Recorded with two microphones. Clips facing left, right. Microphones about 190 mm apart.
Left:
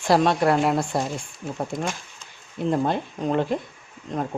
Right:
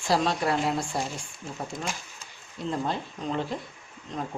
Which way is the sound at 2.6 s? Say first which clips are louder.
Left 7 dB; 55° left (ahead or behind).